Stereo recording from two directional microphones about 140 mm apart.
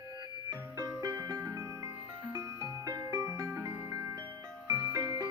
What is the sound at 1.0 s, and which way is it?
Music, 25° right (ahead or behind).